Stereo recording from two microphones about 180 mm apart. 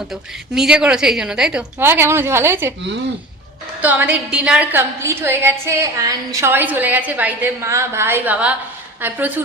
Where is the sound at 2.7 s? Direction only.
80° right.